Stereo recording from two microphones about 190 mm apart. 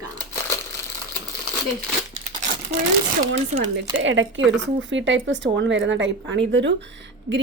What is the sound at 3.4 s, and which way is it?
Speech, 30° right (ahead or behind).